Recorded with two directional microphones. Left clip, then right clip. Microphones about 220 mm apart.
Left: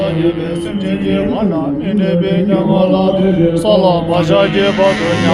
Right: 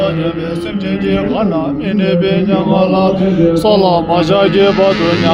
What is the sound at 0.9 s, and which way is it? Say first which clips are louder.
Chant: right 1 dB; 45° right (ahead or behind).